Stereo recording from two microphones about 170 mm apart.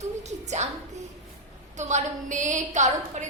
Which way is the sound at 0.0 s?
40° right (ahead or behind).